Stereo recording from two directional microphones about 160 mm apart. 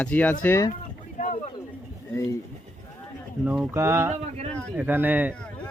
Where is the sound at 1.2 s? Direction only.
50° left (ahead or behind).